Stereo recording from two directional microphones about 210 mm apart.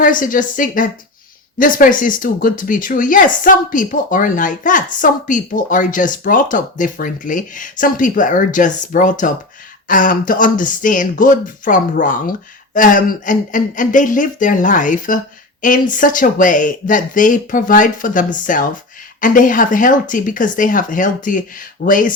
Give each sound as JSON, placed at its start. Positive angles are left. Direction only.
{"t": 0.0, "sound": "speech", "side_deg": 40}